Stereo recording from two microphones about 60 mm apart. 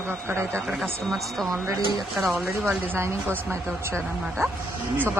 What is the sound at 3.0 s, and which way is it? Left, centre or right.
A woman's voice, right.